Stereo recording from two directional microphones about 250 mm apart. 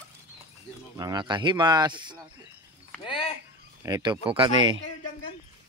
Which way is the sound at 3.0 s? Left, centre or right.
Left.